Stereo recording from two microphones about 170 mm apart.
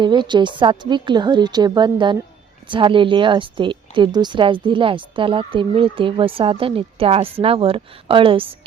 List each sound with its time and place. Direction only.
0.0 s speech: 25° right (ahead or behind)